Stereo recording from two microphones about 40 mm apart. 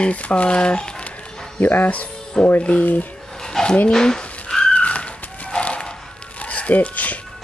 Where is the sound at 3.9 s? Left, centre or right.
Centre.